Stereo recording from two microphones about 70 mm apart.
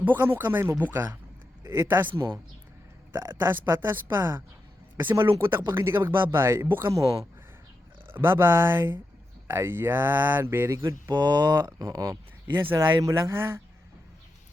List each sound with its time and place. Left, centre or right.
0.0 s speech: right
6.9 s speech: right
8.1 s speech: right
10.7 s speech: right
11.1 s speech: right
11.9 s speech: right
12.5 s speech: right
12.7 s speech: right
13.3 s speech: right